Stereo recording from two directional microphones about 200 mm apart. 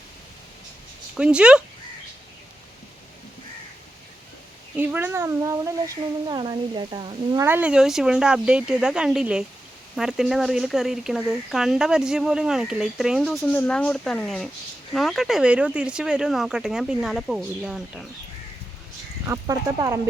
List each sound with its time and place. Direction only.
1.1 s speech: 5° right (ahead or behind)
4.8 s speech: 10° right (ahead or behind)
19.2 s speech: 15° right (ahead or behind)